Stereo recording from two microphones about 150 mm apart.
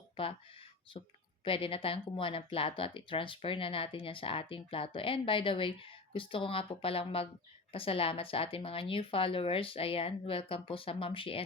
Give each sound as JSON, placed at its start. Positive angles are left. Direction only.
{"t": 0.9, "sound": "speech", "side_deg": 40}